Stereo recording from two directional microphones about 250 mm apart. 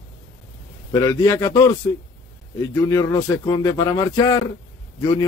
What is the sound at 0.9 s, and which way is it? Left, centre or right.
Speech, centre.